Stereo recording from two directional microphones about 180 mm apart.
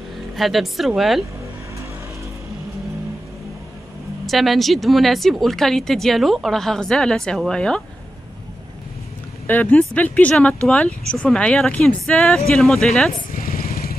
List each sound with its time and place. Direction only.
0.4 s speech: centre (ahead or behind)
4.3 s speech: centre (ahead or behind)
9.5 s speech: 10° left (ahead or behind)
13.1 s vehicle: 50° left (ahead or behind)